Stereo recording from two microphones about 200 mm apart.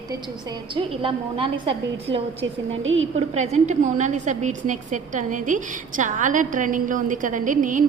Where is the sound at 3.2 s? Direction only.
35° right (ahead or behind).